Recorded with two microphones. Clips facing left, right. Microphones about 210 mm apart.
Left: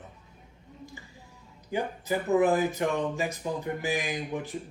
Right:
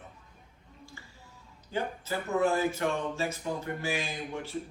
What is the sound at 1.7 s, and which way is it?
A man's voice, 15° left (ahead or behind).